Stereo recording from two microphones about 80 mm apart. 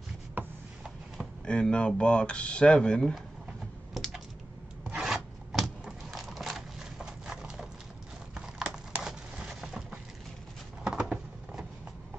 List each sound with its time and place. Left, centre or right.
0.4 s rub: right
1.4 s speech: centre
3.9 s typing: centre
4.9 s a sound: centre